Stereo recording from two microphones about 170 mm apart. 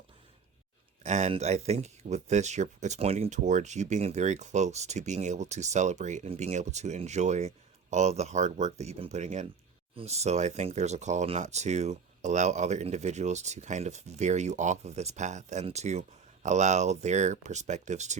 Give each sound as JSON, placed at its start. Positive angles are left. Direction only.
{"t": 1.0, "sound": "speech", "side_deg": -40}